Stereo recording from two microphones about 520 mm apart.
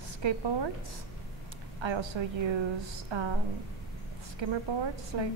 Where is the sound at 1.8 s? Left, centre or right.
Right.